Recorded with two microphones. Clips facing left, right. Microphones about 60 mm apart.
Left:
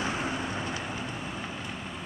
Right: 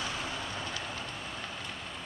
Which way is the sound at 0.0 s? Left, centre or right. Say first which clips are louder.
Left 5 dB; left.